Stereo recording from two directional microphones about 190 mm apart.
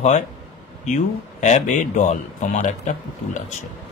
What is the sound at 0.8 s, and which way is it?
Speech, 40° left (ahead or behind).